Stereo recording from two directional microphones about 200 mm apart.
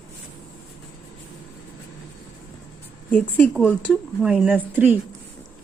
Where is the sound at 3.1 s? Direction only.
5° left (ahead or behind).